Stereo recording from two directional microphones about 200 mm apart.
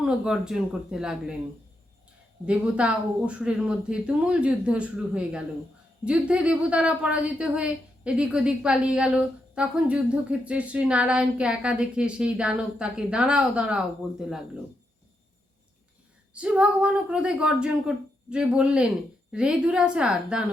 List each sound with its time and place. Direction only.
0.0 s a woman's voice: 5° right (ahead or behind)
2.5 s a woman's voice: 5° right (ahead or behind)
16.3 s a woman's voice: 5° right (ahead or behind)